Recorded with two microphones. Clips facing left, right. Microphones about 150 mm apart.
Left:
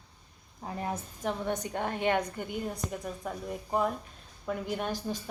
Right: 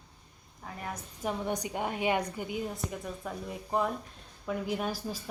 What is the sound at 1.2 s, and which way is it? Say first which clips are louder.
A woman's voice: even; 10° right (ahead or behind).